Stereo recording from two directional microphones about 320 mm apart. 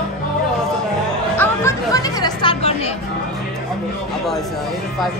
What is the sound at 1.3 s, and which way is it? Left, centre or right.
Music, centre.